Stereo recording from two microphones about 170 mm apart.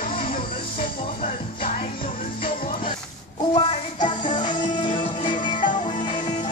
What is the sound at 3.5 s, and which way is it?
Music, 30° left (ahead or behind).